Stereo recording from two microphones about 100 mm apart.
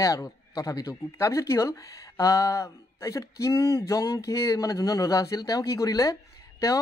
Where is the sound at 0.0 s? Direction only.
35° left (ahead or behind).